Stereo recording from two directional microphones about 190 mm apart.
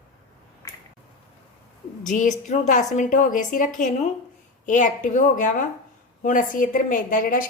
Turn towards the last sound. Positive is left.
turn(degrees=45)  # may be behind; listen again after turning